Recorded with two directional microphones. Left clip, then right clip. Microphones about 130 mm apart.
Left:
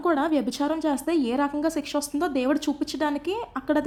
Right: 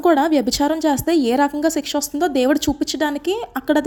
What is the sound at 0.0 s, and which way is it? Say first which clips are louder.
A woman's voice: right 8 dB; 25° right (ahead or behind).